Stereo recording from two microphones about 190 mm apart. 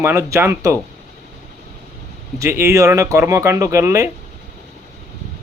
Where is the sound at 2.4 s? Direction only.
15° right (ahead or behind).